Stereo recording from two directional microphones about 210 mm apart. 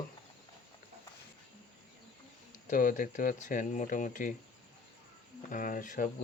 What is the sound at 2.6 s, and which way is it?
Speech, 40° left (ahead or behind).